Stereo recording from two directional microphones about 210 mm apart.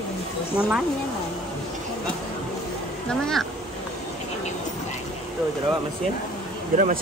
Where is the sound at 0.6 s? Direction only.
5° right (ahead or behind).